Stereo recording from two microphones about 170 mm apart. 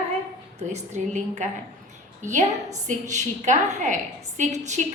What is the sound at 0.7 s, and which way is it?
A woman's voice, 45° right (ahead or behind).